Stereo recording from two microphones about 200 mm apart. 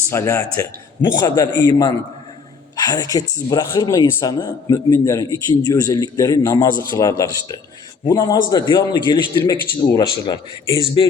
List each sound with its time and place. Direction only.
0.1 s speech: 15° left (ahead or behind)